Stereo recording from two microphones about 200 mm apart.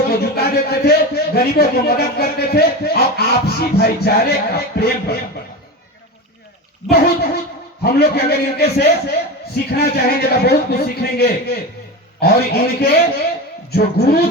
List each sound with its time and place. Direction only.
0.1 s a man's voice: 50° left (ahead or behind)
6.9 s a man's voice: 50° left (ahead or behind)